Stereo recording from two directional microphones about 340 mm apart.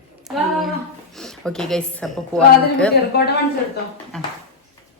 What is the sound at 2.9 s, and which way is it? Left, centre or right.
Speech, left.